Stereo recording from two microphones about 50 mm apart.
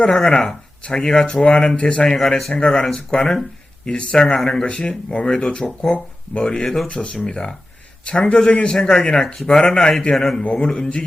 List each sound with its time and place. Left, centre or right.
0.0 s speech: centre
2.1 s speech: centre
4.4 s speech: centre
4.6 s speech: centre